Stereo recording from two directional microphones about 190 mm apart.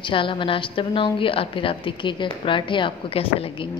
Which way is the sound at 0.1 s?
25° left (ahead or behind).